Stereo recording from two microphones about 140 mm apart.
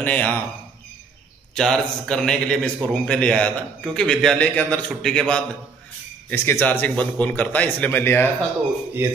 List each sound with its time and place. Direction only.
0.0 s a man's voice: 10° left (ahead or behind)
1.5 s a man's voice: 5° left (ahead or behind)
6.3 s a man's voice: 15° left (ahead or behind)